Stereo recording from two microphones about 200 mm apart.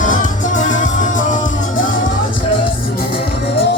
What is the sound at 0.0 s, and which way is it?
Music, 40° left (ahead or behind).